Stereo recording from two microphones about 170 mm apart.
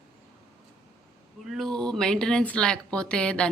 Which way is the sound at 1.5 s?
Centre (ahead or behind).